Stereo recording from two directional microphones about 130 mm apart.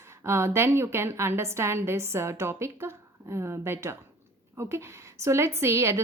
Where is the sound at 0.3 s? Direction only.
20° right (ahead or behind).